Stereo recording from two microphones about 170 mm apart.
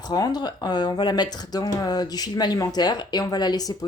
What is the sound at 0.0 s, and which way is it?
Speech, 25° left (ahead or behind).